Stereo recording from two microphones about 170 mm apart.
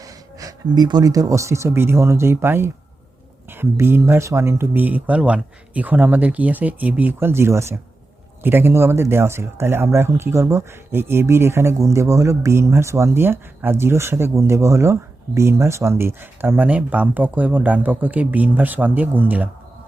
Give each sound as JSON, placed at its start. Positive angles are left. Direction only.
{"t": 0.0, "sound": "speech", "side_deg": -20}